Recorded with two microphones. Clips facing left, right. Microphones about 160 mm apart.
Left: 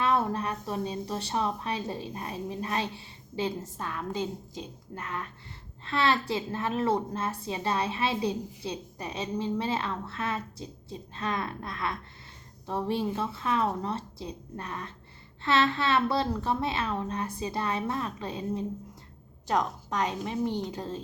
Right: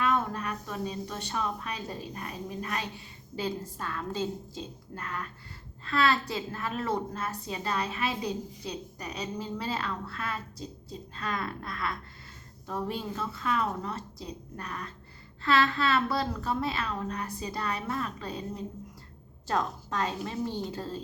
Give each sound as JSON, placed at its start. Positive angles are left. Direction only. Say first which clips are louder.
{"t": 0.0, "sound": "a woman's voice", "louder": "left 2 dB", "side_deg": 30}